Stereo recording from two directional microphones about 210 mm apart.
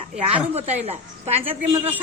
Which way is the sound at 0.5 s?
30° right (ahead or behind).